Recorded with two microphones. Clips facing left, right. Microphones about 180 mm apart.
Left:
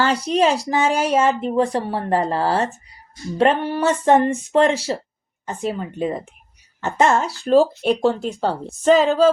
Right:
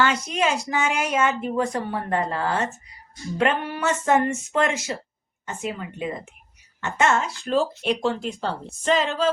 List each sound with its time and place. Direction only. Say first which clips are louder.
0.0 s speech: left 5 dB; 35° left (ahead or behind)